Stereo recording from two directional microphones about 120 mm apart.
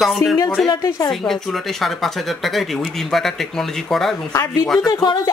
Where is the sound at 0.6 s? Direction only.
30° left (ahead or behind).